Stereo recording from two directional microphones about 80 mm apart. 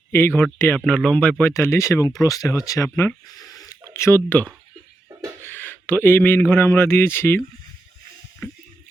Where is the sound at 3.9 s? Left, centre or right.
Left.